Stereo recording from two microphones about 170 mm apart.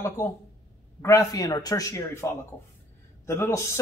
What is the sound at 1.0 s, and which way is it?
A man's voice, 20° left (ahead or behind).